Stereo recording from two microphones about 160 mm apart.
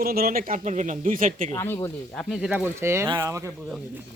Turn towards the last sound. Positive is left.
turn(degrees=-20)  # may be behind; listen again after turning